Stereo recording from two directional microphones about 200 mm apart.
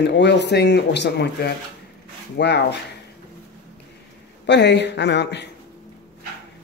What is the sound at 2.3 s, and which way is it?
Speech, 55° left (ahead or behind).